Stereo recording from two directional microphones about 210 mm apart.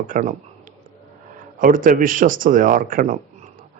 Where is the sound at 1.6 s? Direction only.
40° right (ahead or behind).